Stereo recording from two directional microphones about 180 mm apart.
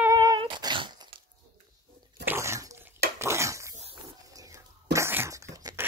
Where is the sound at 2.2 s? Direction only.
15° right (ahead or behind).